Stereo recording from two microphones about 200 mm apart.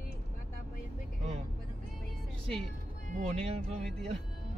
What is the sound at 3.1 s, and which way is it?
Speech, 35° right (ahead or behind).